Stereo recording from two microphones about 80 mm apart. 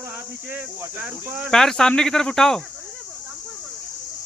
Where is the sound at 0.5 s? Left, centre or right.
Centre.